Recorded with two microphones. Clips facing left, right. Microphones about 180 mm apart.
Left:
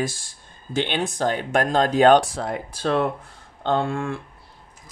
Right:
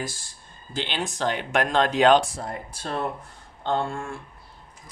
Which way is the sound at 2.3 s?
75° left (ahead or behind).